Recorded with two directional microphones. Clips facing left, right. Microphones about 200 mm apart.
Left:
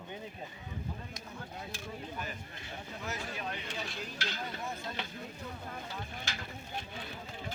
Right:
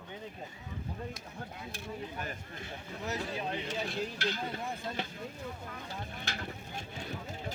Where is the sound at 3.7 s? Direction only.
55° right (ahead or behind).